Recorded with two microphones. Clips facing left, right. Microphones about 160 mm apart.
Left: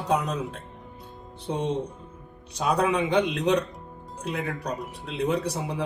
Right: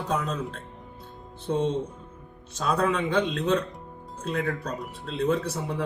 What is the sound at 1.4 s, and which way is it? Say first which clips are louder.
Speech: right 2 dB; 15° left (ahead or behind).